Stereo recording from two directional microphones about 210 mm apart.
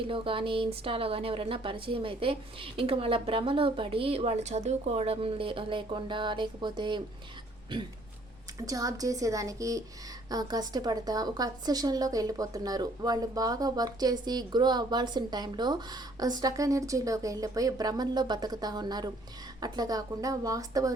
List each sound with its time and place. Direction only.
0.1 s a woman's voice: 25° right (ahead or behind)